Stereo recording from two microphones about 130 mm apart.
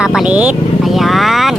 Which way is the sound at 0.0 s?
5° right (ahead or behind).